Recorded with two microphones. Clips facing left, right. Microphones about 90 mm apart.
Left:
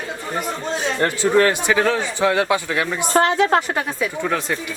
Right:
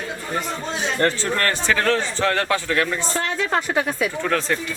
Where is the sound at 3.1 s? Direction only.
65° left (ahead or behind).